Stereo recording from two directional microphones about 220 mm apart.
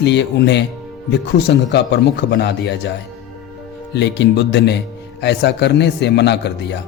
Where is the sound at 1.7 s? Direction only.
50° left (ahead or behind).